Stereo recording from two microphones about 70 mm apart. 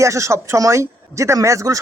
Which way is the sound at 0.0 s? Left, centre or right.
Right.